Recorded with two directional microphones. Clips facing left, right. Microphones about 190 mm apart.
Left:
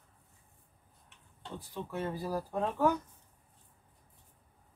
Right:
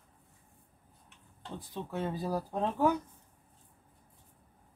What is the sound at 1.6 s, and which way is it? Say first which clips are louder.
Speech: right 1 dB; 20° right (ahead or behind).